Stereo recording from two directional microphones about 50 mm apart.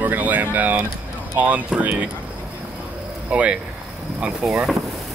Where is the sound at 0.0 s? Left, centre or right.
Right.